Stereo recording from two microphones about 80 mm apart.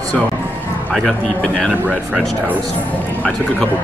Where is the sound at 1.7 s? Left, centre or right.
Right.